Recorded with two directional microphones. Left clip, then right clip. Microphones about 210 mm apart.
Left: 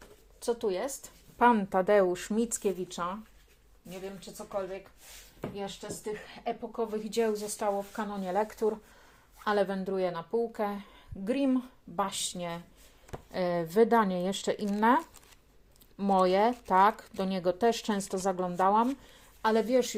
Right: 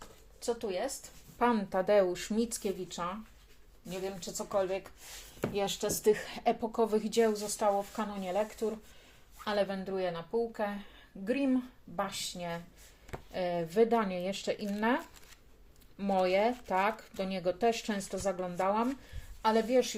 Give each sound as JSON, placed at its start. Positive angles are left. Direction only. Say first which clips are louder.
{"t": 0.3, "sound": "speech", "louder": "left 3 dB", "side_deg": 40}
{"t": 1.4, "sound": "speech", "louder": "left 5 dB", "side_deg": 25}
{"t": 3.8, "sound": "speech", "louder": "right 3 dB", "side_deg": -10}
{"t": 5.4, "sound": "speech", "louder": "right 6 dB", "side_deg": -50}
{"t": 7.1, "sound": "a woman's voice", "louder": "right 1 dB", "side_deg": 5}
{"t": 8.2, "sound": "speech", "louder": "left 4 dB", "side_deg": 25}